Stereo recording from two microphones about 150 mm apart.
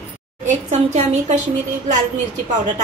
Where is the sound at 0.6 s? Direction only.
50° right (ahead or behind).